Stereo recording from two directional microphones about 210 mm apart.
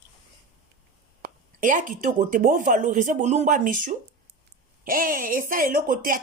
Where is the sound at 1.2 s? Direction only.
40° right (ahead or behind).